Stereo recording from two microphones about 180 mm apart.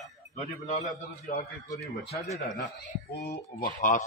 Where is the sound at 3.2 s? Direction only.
50° left (ahead or behind).